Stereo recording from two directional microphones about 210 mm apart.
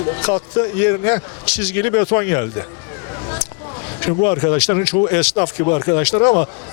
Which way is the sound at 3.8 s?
15° left (ahead or behind).